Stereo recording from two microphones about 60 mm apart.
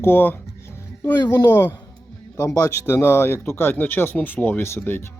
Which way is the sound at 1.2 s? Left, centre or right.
Left.